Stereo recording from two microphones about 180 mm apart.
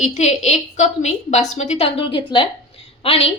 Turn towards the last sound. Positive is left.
turn(degrees=30)  # may be behind; listen again after turning